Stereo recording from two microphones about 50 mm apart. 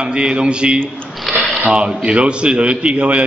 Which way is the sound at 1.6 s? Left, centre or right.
Centre.